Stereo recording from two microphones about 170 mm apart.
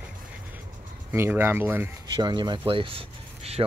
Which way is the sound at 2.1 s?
25° right (ahead or behind).